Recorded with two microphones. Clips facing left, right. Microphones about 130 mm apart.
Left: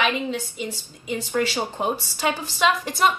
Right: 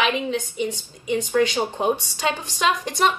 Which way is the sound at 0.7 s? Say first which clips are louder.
Right 4 dB; 10° left (ahead or behind).